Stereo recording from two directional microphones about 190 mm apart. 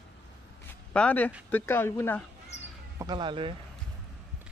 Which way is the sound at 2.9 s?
20° right (ahead or behind).